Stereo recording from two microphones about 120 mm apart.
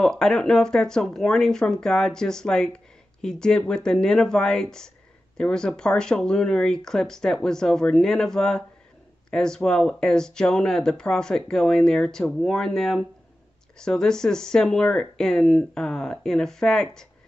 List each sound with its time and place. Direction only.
0.0 s speech: 5° left (ahead or behind)